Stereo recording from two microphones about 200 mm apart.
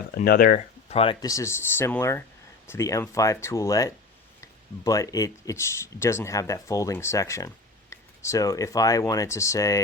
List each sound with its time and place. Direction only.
0.2 s speech: 45° left (ahead or behind)
0.9 s speech: 30° left (ahead or behind)
1.2 s speech: 15° left (ahead or behind)